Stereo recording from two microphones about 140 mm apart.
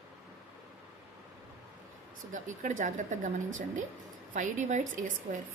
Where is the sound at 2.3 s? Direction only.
65° right (ahead or behind).